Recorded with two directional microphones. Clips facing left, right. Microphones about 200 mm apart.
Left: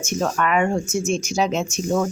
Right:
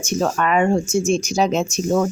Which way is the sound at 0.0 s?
30° right (ahead or behind).